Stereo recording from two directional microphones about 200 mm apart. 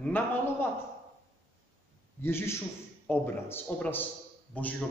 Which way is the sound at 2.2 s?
10° left (ahead or behind).